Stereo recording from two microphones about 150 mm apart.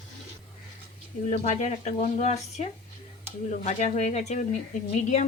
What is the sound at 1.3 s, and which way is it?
A woman's voice, 50° left (ahead or behind).